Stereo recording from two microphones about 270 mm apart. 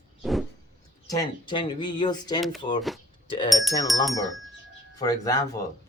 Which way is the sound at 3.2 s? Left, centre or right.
Centre.